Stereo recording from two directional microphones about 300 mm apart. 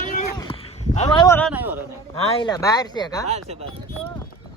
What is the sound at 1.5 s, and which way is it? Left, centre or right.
Speech, centre.